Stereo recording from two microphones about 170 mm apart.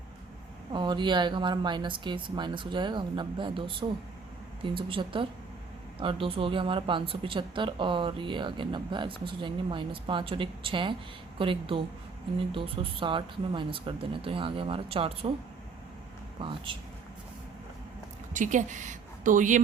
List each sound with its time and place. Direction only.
0.7 s speech: 25° right (ahead or behind)
16.4 s speech: 30° right (ahead or behind)
18.3 s a woman's voice: 45° right (ahead or behind)